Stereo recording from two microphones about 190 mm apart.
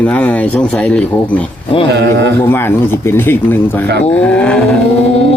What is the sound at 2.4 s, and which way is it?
Speech, 10° left (ahead or behind).